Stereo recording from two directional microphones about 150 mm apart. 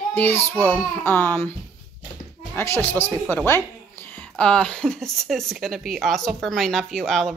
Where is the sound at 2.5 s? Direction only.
15° left (ahead or behind).